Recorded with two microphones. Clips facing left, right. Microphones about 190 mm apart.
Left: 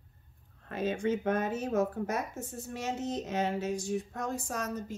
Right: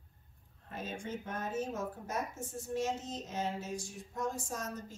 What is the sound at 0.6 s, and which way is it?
Speech, 80° left.